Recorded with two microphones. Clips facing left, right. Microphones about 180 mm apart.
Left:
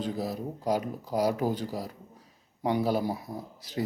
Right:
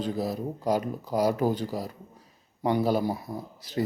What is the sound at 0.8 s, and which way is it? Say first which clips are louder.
Speech: right 2 dB; 5° left (ahead or behind).